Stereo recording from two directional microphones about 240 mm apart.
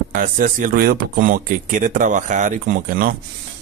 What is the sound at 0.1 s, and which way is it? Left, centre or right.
Speech, right.